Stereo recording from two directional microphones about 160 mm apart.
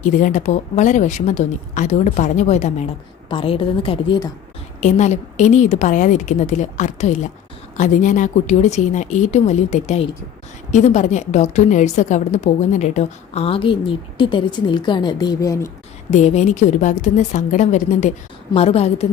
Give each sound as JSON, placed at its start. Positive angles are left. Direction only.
{"t": 0.0, "sound": "a woman's voice", "side_deg": 55}
{"t": 3.2, "sound": "a woman's voice", "side_deg": 35}
{"t": 4.8, "sound": "a woman's voice", "side_deg": 50}
{"t": 16.0, "sound": "a woman's voice", "side_deg": 45}